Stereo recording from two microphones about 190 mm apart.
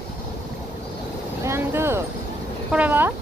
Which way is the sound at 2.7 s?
10° right (ahead or behind).